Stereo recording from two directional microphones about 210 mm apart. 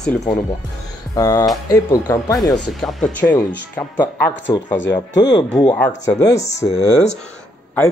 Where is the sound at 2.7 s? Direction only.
Centre (ahead or behind).